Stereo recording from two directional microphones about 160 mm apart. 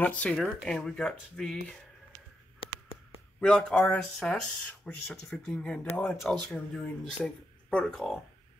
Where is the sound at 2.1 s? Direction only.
25° right (ahead or behind).